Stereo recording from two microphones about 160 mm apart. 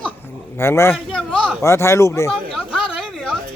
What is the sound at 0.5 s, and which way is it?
Speech, 15° left (ahead or behind).